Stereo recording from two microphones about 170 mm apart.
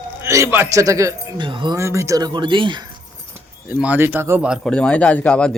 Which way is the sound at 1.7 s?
15° right (ahead or behind).